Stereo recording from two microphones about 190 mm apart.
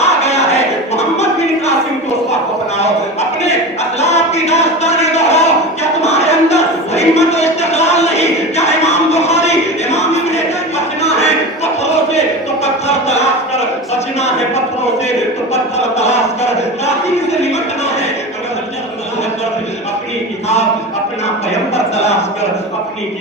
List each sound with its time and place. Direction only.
0.0 s music: 35° left (ahead or behind)
2.7 s a sound: 35° left (ahead or behind)
15.5 s music: 35° left (ahead or behind)